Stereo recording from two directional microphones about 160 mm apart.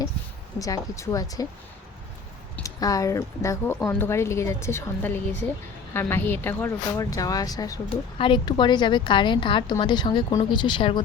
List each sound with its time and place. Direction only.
0.6 s a woman's voice: 20° left (ahead or behind)
2.6 s a woman's voice: 20° left (ahead or behind)